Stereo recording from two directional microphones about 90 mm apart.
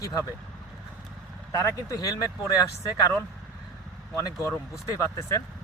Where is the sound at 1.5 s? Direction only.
40° left (ahead or behind).